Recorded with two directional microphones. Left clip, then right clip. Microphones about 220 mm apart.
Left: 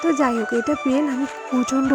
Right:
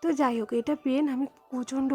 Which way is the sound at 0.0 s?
20° left (ahead or behind).